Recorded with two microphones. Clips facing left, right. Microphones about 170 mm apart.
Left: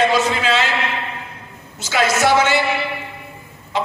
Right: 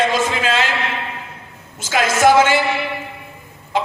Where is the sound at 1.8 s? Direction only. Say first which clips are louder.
Right 2 dB; 50° right (ahead or behind).